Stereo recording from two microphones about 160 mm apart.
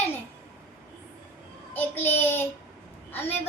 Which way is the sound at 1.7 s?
10° left (ahead or behind).